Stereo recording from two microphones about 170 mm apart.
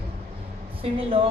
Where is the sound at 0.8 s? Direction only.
35° right (ahead or behind).